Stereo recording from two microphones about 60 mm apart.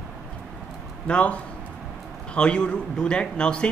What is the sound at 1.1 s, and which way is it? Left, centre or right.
A man's voice, left.